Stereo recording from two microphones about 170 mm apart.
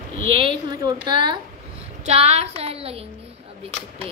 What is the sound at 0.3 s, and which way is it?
A woman's voice, 30° right (ahead or behind).